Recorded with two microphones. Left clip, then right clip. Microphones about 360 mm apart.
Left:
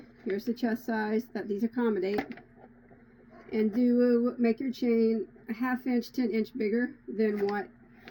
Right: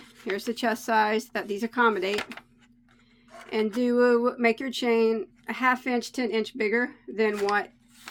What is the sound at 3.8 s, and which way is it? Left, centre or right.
Speech, centre.